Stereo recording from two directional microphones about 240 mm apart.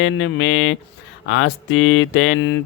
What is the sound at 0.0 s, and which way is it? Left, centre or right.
Mantra, left.